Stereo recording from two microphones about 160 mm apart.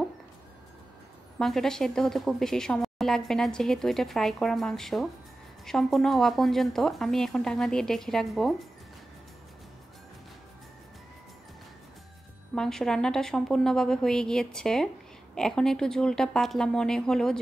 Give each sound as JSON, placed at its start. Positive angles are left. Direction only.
{"t": 1.4, "sound": "a woman's voice", "side_deg": 0}
{"t": 12.5, "sound": "a woman's voice", "side_deg": 5}